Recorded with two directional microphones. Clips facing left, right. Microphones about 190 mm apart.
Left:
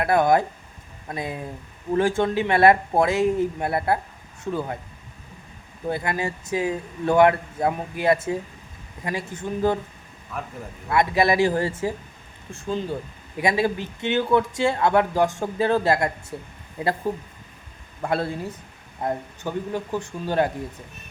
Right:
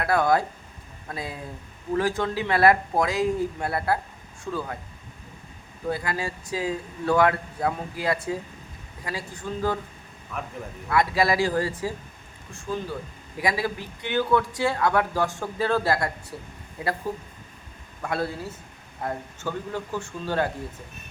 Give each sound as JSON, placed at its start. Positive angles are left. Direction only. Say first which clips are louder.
{"t": 0.0, "sound": "speech", "louder": "left 3 dB", "side_deg": 20}
{"t": 5.9, "sound": "speech", "louder": "left 3 dB", "side_deg": 20}
{"t": 10.8, "sound": "speech", "louder": "left 2 dB", "side_deg": 20}
{"t": 18.0, "sound": "speech", "louder": "left 3 dB", "side_deg": 30}
{"t": 19.0, "sound": "speech", "louder": "left 3 dB", "side_deg": 15}